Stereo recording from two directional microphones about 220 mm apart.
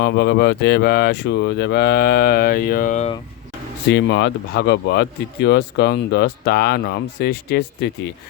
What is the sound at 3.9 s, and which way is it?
Mantra, 50° left (ahead or behind).